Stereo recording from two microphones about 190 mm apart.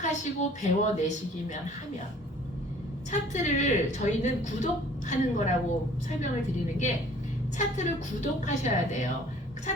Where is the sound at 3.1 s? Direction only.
40° left (ahead or behind).